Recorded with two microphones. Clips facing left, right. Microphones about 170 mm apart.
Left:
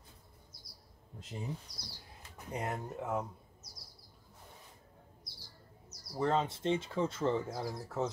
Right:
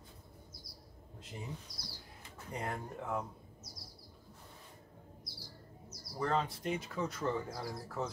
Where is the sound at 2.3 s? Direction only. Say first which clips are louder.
Left 2 dB; 20° left (ahead or behind).